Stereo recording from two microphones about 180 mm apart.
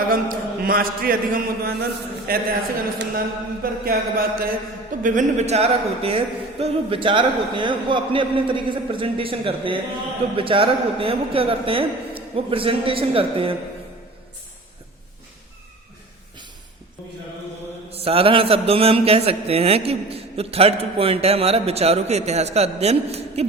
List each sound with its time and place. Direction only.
0.1 s a man's voice: 55° right (ahead or behind)
2.3 s mantra: 55° right (ahead or behind)
5.0 s a man's voice: 40° right (ahead or behind)
17.9 s a man's voice: 30° right (ahead or behind)